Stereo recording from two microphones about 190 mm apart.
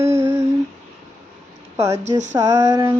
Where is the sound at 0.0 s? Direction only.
15° right (ahead or behind).